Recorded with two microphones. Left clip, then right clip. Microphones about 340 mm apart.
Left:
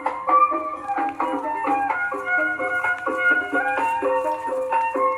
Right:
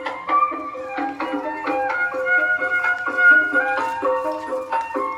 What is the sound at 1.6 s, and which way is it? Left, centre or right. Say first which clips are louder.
Music: right 1 dB; centre.